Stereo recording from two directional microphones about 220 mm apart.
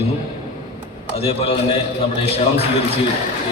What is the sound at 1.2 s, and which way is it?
Speech, 25° left (ahead or behind).